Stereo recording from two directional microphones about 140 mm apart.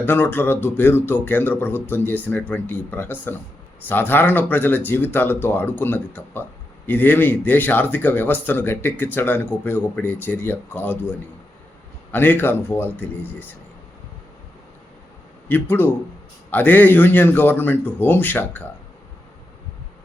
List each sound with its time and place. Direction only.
0.0 s speech: 15° left (ahead or behind)
12.1 s speech: 15° left (ahead or behind)
15.4 s speech: 15° left (ahead or behind)